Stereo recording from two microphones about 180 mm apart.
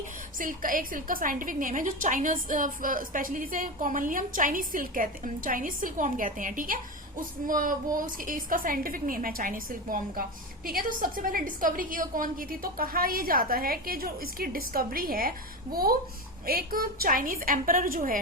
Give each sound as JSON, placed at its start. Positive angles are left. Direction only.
{"t": 0.3, "sound": "a woman's voice", "side_deg": -50}